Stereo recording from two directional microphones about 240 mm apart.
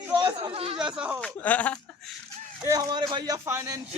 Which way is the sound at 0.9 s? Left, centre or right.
Centre.